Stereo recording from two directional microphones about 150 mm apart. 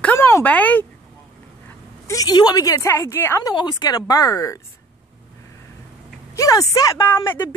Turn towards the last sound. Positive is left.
turn(degrees=15)  # may be behind; listen again after turning